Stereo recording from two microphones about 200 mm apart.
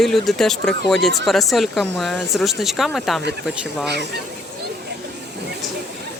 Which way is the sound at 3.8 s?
55° right (ahead or behind).